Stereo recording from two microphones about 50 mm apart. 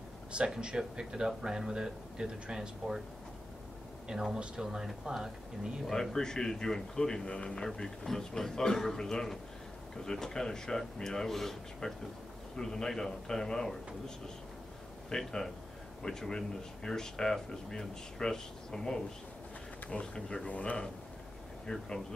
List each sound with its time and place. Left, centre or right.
0.6 s speech: centre
4.1 s speech: centre
6.1 s a man's voice: centre
20.4 s speech: left
21.6 s a man's voice: centre